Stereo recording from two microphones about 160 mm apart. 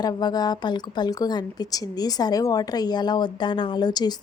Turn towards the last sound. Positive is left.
turn(degrees=25)  # may be behind; listen again after turning